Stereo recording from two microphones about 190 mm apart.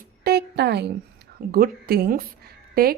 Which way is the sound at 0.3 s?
60° right (ahead or behind).